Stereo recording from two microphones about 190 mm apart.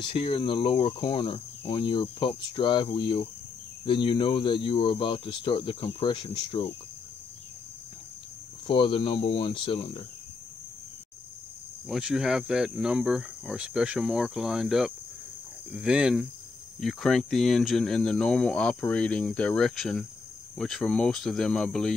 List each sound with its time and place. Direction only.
0.0 s cricket: 30° left (ahead or behind)
8.6 s cricket: 25° left (ahead or behind)
11.9 s speech: 5° right (ahead or behind)